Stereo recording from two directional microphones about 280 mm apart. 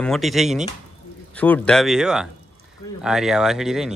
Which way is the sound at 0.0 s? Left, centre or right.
Centre.